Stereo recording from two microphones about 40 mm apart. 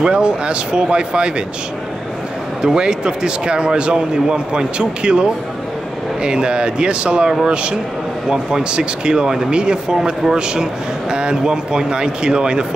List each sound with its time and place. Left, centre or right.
0.0 s speech: right
2.6 s speech: centre